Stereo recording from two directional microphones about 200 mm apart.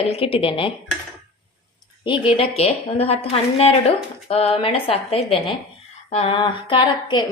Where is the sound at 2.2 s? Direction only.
30° left (ahead or behind).